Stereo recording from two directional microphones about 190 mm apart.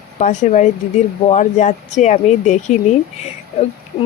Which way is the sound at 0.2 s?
40° left (ahead or behind).